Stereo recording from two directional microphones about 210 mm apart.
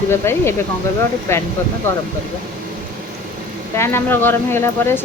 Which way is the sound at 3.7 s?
10° left (ahead or behind).